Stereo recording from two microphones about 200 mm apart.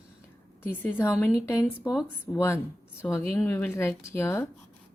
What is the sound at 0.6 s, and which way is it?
Speech, 10° left (ahead or behind).